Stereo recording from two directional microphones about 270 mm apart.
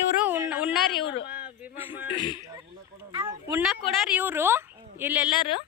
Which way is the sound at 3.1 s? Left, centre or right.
Centre.